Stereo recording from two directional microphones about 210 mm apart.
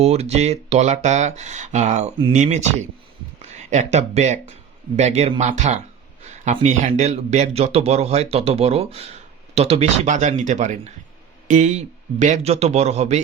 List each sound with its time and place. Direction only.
0.0 s a man's voice: 30° right (ahead or behind)